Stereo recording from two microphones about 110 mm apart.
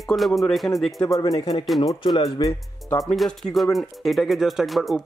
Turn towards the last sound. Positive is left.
turn(degrees=0)  # may be behind; listen again after turning